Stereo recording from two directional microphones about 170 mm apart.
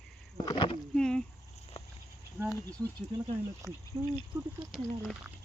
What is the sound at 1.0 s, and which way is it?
Speech, 5° left (ahead or behind).